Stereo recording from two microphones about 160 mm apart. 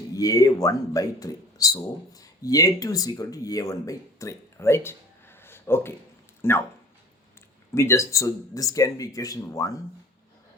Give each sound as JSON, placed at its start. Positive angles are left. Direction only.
{"t": 0.1, "sound": "speech", "side_deg": 20}
{"t": 7.7, "sound": "speech", "side_deg": 15}